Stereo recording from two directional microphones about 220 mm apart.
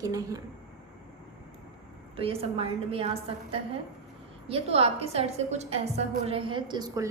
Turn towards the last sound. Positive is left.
turn(degrees=-15)  # may be behind; listen again after turning